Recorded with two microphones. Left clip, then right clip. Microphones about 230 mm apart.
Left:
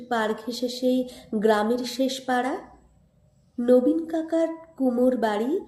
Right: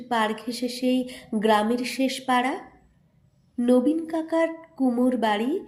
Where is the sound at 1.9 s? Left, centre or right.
Right.